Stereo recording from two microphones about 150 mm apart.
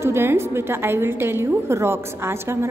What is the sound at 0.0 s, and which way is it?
A woman's voice, 15° right (ahead or behind).